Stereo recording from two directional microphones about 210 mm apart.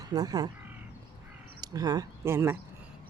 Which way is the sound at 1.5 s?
20° right (ahead or behind).